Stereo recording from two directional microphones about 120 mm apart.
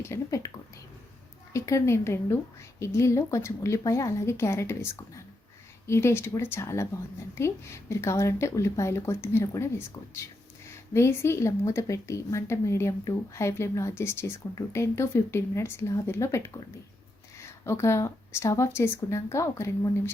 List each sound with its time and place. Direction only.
0.0 s a woman's voice: 25° left (ahead or behind)
1.5 s a woman's voice: 25° left (ahead or behind)
17.4 s a woman's voice: 25° left (ahead or behind)